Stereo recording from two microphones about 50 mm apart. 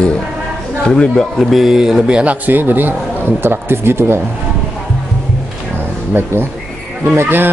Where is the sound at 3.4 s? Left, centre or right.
Right.